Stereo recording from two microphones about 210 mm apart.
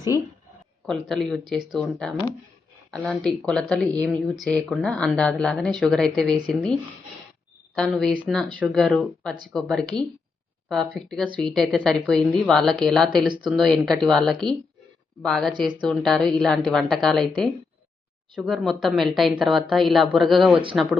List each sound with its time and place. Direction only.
0.9 s speech: centre (ahead or behind)
7.8 s speech: centre (ahead or behind)
13.2 s speech: 20° right (ahead or behind)
13.5 s speech: centre (ahead or behind)